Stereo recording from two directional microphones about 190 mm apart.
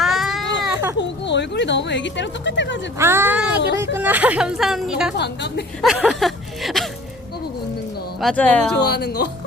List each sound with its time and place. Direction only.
0.0 s baby cry: centre (ahead or behind)
0.9 s speech: 65° left (ahead or behind)
3.0 s speech: 10° right (ahead or behind)
5.1 s speech: 65° left (ahead or behind)
5.8 s a sound: centre (ahead or behind)
8.2 s speech: 5° left (ahead or behind)
8.8 s speech: 60° left (ahead or behind)